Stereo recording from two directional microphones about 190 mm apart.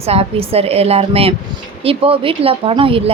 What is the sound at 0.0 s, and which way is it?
A woman's voice, 30° right (ahead or behind).